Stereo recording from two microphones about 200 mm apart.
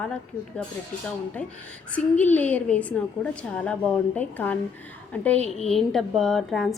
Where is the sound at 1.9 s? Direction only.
5° left (ahead or behind).